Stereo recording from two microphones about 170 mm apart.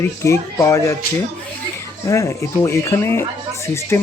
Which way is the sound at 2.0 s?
20° left (ahead or behind).